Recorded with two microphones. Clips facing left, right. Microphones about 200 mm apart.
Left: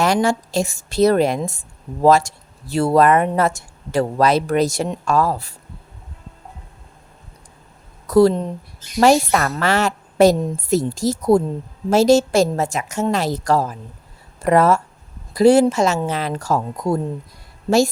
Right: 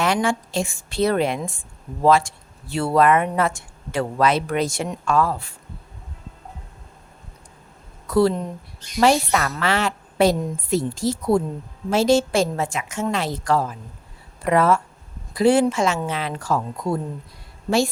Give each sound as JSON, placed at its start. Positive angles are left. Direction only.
{"t": 0.0, "sound": "speech", "side_deg": 40}
{"t": 8.0, "sound": "a woman's voice", "side_deg": 40}